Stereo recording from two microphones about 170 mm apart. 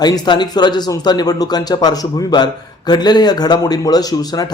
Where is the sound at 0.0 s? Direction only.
25° left (ahead or behind).